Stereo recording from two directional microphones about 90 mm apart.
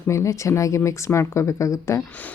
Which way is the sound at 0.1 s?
35° left (ahead or behind).